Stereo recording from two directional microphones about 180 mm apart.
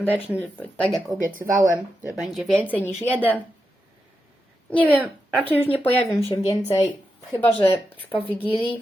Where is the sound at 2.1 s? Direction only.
Centre (ahead or behind).